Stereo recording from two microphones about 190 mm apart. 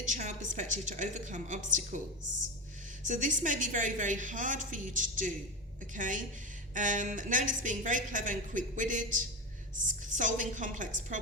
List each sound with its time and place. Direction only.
0.0 s a woman's voice: 40° right (ahead or behind)
3.1 s a woman's voice: 40° right (ahead or behind)